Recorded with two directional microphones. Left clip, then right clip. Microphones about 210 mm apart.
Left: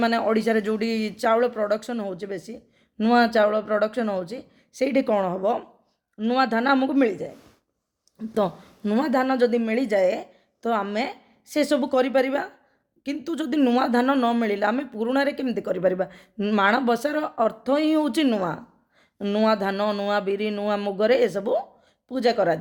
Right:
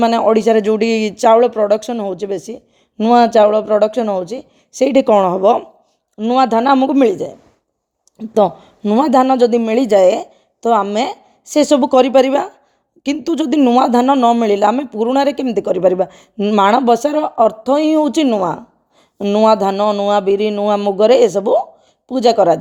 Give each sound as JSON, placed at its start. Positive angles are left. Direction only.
{"t": 0.0, "sound": "speech", "side_deg": -30}
{"t": 6.1, "sound": "speech", "side_deg": -25}
{"t": 8.2, "sound": "speech", "side_deg": -25}